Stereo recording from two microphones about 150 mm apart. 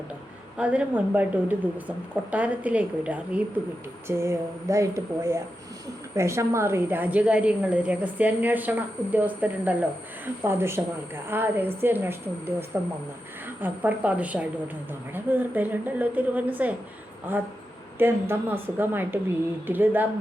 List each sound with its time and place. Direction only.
0.5 s a woman's voice: 10° right (ahead or behind)
17.9 s a woman's voice: 15° right (ahead or behind)